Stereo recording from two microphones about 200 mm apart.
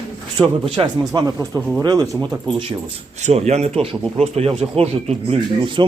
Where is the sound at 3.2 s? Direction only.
30° right (ahead or behind).